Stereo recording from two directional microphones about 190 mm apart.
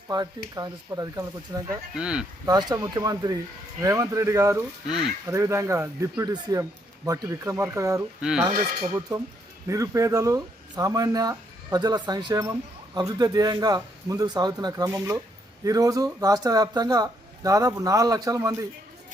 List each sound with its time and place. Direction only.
0.1 s speech: 25° right (ahead or behind)
2.0 s speech: 5° right (ahead or behind)
2.5 s speech: 20° right (ahead or behind)
4.9 s speech: centre (ahead or behind)
5.3 s speech: 15° right (ahead or behind)
8.2 s speech: 5° right (ahead or behind)
9.0 s speech: 20° right (ahead or behind)